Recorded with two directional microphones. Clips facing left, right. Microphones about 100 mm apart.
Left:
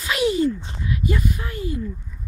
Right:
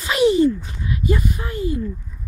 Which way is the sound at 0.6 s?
30° left (ahead or behind).